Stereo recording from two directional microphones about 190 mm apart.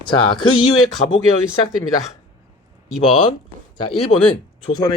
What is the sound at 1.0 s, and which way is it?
Speech, 40° left (ahead or behind).